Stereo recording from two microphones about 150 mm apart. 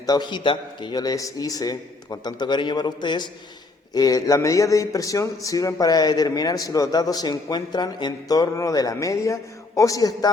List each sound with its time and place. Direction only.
0.0 s a man's voice: 25° left (ahead or behind)